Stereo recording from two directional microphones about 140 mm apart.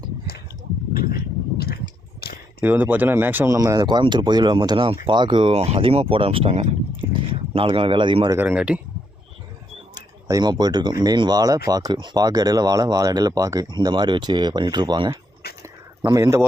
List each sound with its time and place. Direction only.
0.9 s a sound: 90° left
2.6 s speech: 10° right (ahead or behind); by 5.5 s 35° right (ahead or behind)
5.5 s speech: 50° right (ahead or behind)
8.4 s speech: 10° right (ahead or behind)
9.9 s speech: 25° right (ahead or behind)
15.6 s a sound: 25° right (ahead or behind)